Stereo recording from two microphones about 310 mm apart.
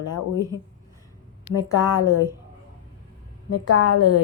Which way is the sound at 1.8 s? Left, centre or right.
Centre.